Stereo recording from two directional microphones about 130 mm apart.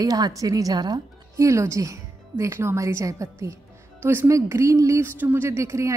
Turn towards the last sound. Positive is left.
turn(degrees=-25)  # may be behind; listen again after turning